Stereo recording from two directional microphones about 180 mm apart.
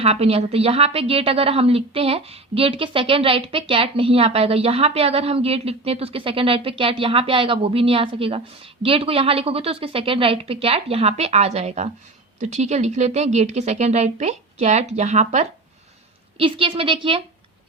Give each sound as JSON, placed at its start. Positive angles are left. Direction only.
{"t": 0.0, "sound": "a woman's voice", "side_deg": -35}